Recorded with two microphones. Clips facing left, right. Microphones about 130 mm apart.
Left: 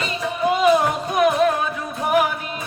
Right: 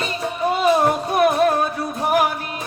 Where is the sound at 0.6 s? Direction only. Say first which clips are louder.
Right 1 dB; 35° right (ahead or behind).